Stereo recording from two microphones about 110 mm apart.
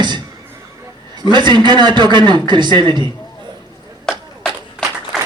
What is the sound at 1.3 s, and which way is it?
A man's voice, 45° right (ahead or behind).